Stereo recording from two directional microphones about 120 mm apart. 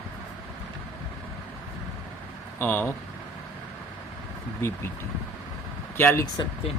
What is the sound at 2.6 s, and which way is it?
Speech, 15° left (ahead or behind).